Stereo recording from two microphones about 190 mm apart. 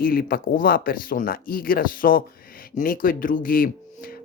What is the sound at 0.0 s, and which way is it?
Speech, 50° left (ahead or behind).